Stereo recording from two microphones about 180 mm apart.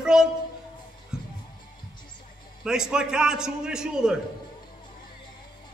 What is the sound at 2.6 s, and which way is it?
A man's voice, 5° right (ahead or behind).